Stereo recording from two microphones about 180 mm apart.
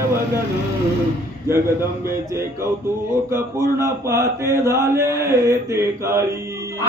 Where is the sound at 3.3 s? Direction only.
15° right (ahead or behind).